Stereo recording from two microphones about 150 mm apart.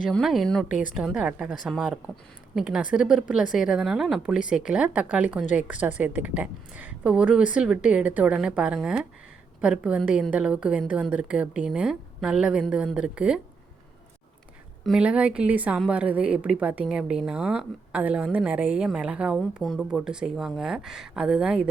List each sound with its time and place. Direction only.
0.0 s speech: 5° left (ahead or behind)
0.7 s speech: 60° left (ahead or behind)
0.9 s a woman's voice: 5° right (ahead or behind)
14.8 s a woman's voice: 5° right (ahead or behind)